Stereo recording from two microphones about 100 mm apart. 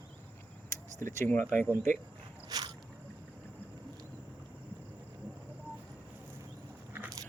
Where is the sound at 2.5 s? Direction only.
40° right (ahead or behind).